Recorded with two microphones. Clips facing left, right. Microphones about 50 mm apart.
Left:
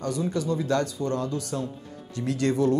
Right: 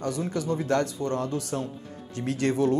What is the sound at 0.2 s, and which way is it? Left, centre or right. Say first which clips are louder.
Speech: left 1 dB; right.